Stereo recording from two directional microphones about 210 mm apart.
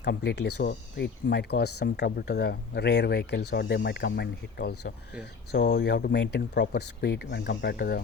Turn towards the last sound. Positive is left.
turn(degrees=50)  # may be behind; listen again after turning